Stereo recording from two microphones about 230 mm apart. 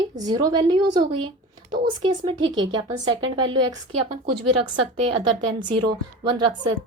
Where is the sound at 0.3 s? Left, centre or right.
Centre.